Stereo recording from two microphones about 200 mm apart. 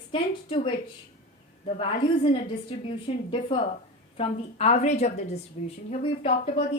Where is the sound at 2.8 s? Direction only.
25° left (ahead or behind).